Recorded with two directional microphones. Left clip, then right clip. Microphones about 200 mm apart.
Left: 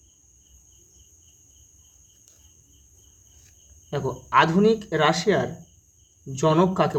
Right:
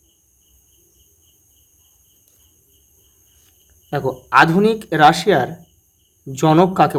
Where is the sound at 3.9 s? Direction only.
35° right (ahead or behind).